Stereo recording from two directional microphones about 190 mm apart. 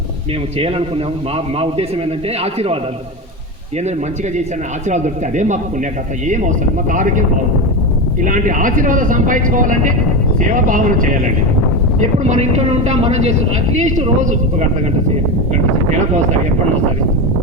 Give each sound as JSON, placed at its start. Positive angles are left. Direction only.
{"t": 0.6, "sound": "speech", "side_deg": -30}
{"t": 4.9, "sound": "speech", "side_deg": -40}
{"t": 15.9, "sound": "speech", "side_deg": -40}